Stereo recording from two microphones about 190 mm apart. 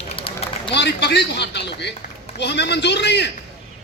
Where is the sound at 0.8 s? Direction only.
60° left (ahead or behind).